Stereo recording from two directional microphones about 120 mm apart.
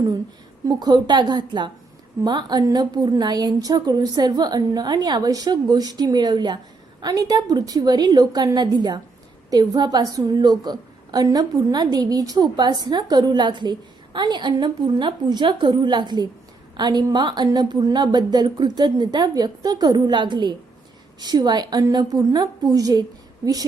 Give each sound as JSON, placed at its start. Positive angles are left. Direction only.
{"t": 0.7, "sound": "a woman's voice", "side_deg": -35}